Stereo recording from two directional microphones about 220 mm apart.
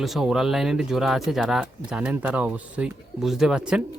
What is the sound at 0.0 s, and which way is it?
Speech, centre (ahead or behind).